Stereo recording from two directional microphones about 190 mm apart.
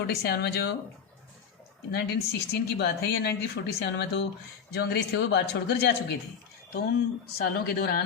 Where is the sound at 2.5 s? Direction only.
60° left (ahead or behind).